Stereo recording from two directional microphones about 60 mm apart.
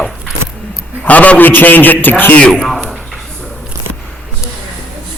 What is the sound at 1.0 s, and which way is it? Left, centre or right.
A man's voice, left.